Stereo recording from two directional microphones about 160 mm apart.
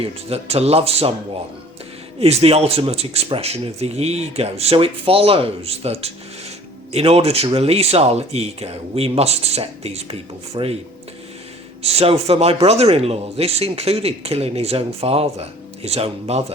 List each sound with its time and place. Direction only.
0.0 s speech: 40° right (ahead or behind)
2.1 s speech: 40° right (ahead or behind)
11.8 s speech: 40° right (ahead or behind)